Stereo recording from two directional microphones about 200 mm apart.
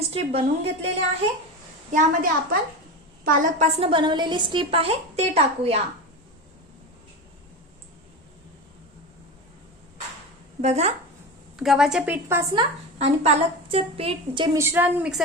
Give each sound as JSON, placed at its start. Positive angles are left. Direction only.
{"t": 0.1, "sound": "a woman's voice", "side_deg": -30}
{"t": 1.9, "sound": "a woman's voice", "side_deg": -40}
{"t": 3.8, "sound": "a woman's voice", "side_deg": -25}
{"t": 10.6, "sound": "a woman's voice", "side_deg": -35}
{"t": 11.6, "sound": "a woman's voice", "side_deg": 0}
{"t": 12.5, "sound": "a woman's voice", "side_deg": -30}
{"t": 14.6, "sound": "a woman's voice", "side_deg": -10}